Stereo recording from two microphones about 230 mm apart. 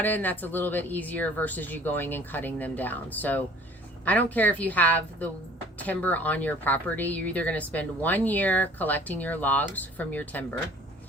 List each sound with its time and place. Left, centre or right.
0.0 s speech: centre